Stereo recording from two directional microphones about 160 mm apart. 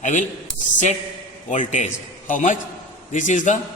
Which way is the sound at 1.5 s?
50° left (ahead or behind).